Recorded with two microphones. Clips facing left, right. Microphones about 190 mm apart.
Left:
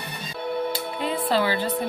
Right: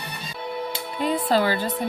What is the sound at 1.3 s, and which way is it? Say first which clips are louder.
Speech: right 1 dB; 45° right (ahead or behind).